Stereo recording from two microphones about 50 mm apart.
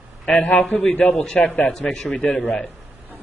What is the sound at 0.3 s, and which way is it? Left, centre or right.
Speech, left.